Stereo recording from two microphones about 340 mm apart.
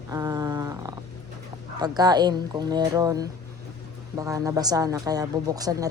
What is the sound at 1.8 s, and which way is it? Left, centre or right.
Speech, centre.